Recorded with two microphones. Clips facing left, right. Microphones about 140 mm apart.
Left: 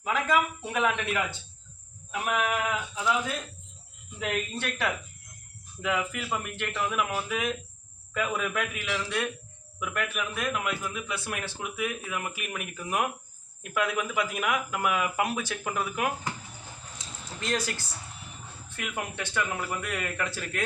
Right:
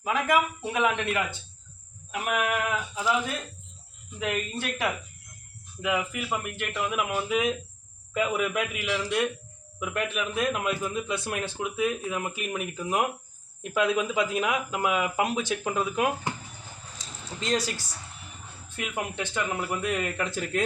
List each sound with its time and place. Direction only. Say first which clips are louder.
0.0 s speech: right 2 dB; 10° right (ahead or behind)
2.3 s male singing: right 1 dB; 5° right (ahead or behind)
4.2 s speech: right 1 dB; 5° right (ahead or behind)
5.8 s male singing: right 1 dB; 5° right (ahead or behind)
6.2 s speech: right 1 dB; 15° right (ahead or behind)
9.8 s speech: right 2 dB; 25° right (ahead or behind)
17.4 s speech: right 3 dB; 15° right (ahead or behind)